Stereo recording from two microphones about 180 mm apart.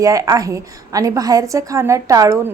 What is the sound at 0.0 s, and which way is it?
A woman's voice, 20° right (ahead or behind).